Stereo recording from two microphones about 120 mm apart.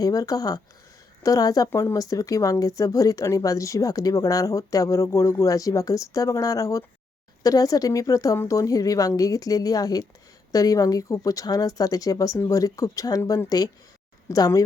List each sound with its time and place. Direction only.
0.0 s speech: 30° left (ahead or behind)